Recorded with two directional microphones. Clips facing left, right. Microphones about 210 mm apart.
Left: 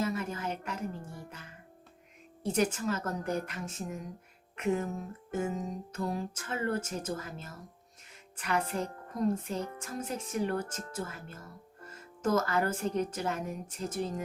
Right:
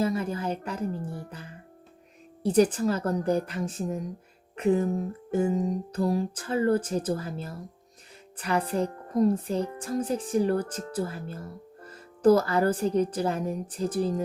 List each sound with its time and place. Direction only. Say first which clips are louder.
0.0 s music: right 6 dB; 30° right (ahead or behind)
2.4 s speech: right 8 dB; 35° right (ahead or behind)